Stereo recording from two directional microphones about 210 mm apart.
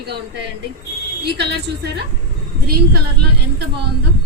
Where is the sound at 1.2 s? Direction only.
50° right (ahead or behind).